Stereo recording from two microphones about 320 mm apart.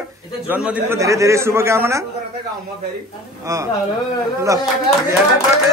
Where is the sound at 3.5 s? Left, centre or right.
Centre.